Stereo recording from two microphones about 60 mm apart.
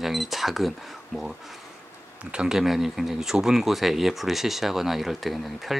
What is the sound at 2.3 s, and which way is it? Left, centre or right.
Speech, centre.